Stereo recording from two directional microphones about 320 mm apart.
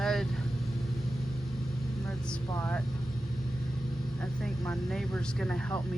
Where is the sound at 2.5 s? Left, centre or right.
Centre.